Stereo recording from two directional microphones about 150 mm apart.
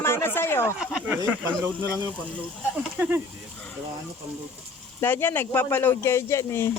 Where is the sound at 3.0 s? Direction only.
15° right (ahead or behind).